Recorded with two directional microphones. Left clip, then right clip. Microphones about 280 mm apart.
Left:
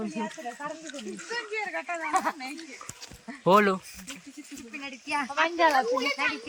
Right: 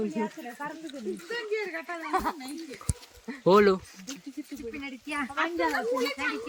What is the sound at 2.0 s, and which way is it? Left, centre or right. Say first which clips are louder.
Speech: left 1 dB; centre.